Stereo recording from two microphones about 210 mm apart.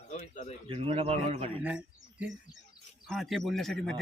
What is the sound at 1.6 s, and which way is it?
A man's voice, 5° right (ahead or behind).